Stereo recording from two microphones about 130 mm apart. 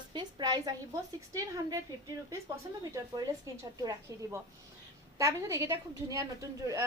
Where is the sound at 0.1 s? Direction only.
35° right (ahead or behind).